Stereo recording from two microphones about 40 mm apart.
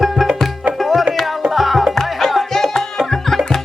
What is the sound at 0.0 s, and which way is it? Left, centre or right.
Music, centre.